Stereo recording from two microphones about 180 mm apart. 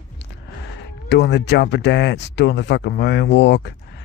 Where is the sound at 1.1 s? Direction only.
70° left (ahead or behind).